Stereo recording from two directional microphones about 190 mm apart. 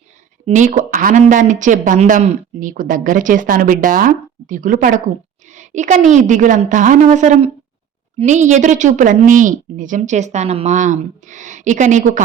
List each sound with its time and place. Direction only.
0.4 s speech: 40° right (ahead or behind)